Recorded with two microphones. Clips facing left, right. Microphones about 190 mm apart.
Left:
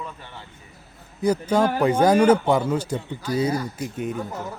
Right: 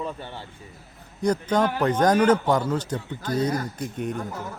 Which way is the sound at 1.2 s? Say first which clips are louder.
Left 2 dB; 5° left (ahead or behind).